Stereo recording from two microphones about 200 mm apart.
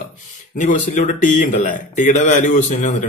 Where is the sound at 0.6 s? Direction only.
35° left (ahead or behind).